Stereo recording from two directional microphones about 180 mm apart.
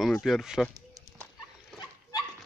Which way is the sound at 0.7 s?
20° right (ahead or behind).